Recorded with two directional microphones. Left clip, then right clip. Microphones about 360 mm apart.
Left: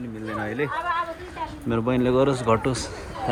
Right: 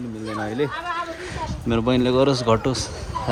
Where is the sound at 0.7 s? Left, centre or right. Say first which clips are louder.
Left 2 dB; centre.